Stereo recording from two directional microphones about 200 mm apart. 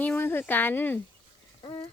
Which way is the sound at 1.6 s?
25° left (ahead or behind).